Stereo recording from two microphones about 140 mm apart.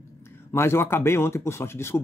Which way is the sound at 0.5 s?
20° left (ahead or behind).